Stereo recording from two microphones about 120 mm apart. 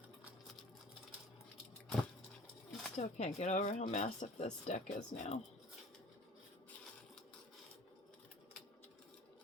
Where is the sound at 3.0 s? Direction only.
65° left (ahead or behind).